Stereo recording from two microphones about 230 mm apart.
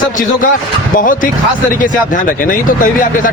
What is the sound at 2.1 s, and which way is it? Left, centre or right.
Speech, left.